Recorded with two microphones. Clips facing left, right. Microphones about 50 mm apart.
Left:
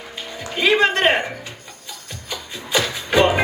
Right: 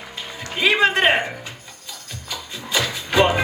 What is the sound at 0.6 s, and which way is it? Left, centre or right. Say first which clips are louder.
Music: left 1 dB; centre.